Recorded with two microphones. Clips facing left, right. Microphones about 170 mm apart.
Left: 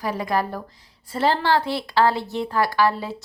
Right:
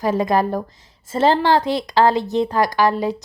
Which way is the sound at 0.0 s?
25° right (ahead or behind).